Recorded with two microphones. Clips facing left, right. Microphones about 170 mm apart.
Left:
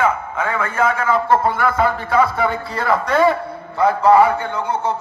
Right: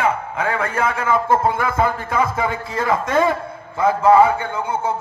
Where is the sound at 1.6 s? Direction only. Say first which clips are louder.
Left 2 dB; 20° right (ahead or behind).